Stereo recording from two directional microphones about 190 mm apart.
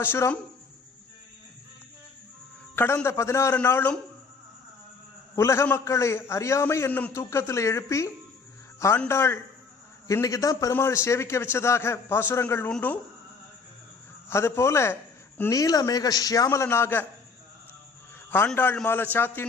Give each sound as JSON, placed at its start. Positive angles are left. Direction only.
{"t": 0.0, "sound": "a man's voice", "side_deg": 10}
{"t": 2.7, "sound": "a man's voice", "side_deg": 10}
{"t": 5.4, "sound": "a man's voice", "side_deg": 15}
{"t": 14.3, "sound": "a man's voice", "side_deg": 15}
{"t": 18.3, "sound": "a man's voice", "side_deg": 10}